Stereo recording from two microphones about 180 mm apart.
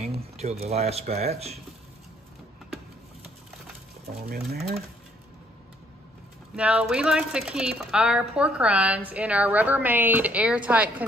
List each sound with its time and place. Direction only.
0.4 s speech: 35° right (ahead or behind)
4.5 s speech: 60° right (ahead or behind)
6.5 s speech: 5° right (ahead or behind)